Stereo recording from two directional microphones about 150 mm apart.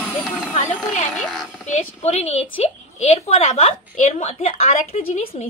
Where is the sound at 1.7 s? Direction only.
45° left (ahead or behind).